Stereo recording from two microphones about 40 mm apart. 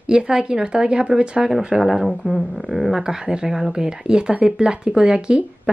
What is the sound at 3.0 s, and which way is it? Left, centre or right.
Speech, centre.